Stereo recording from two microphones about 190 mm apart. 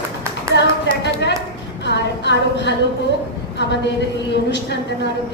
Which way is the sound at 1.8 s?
65° left (ahead or behind).